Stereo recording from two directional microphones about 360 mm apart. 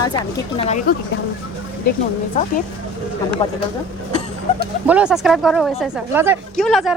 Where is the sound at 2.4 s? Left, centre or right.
Left.